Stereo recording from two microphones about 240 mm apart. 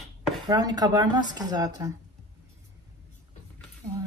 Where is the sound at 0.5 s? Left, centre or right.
Centre.